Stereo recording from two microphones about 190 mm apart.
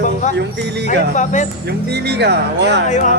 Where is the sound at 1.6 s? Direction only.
60° right (ahead or behind).